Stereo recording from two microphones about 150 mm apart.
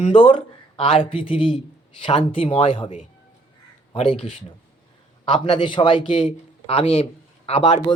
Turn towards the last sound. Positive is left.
turn(degrees=45)  # may be behind; listen again after turning